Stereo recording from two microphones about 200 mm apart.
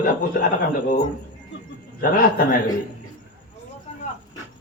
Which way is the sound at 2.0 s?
45° left (ahead or behind).